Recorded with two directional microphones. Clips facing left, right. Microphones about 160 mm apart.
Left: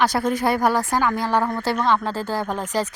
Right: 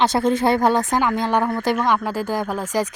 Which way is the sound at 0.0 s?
25° right (ahead or behind).